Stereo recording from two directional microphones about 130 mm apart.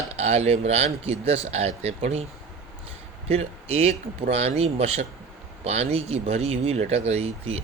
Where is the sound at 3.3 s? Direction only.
50° right (ahead or behind).